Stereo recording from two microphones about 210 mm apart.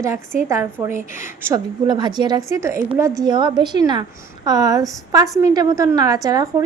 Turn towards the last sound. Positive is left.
turn(degrees=-15)  # may be behind; listen again after turning